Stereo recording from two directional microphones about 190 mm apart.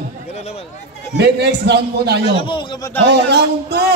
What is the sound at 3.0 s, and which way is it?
Speech, 65° right (ahead or behind).